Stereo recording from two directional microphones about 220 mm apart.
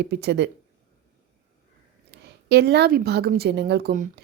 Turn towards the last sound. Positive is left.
turn(degrees=-40)  # may be behind; listen again after turning